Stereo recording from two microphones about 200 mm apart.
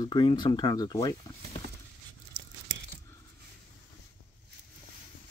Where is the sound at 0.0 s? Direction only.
25° left (ahead or behind).